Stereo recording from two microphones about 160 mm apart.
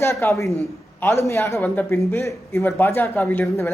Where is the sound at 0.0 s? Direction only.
15° left (ahead or behind).